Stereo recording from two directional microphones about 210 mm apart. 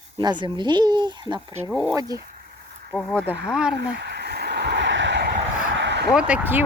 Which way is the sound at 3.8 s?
55° right (ahead or behind).